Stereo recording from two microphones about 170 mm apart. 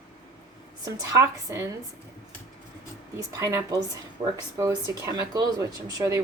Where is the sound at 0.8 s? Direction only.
15° right (ahead or behind).